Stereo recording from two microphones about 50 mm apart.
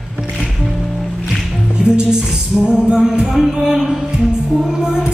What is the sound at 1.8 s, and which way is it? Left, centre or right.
Music, centre.